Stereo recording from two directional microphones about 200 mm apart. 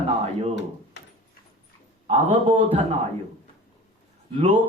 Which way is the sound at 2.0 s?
30° right (ahead or behind).